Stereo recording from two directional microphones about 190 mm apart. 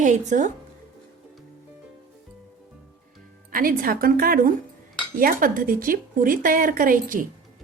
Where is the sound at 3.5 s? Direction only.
50° right (ahead or behind).